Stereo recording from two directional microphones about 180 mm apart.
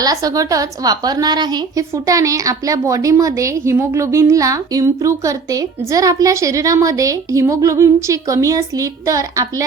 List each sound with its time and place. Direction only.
0.0 s a woman's voice: 20° right (ahead or behind)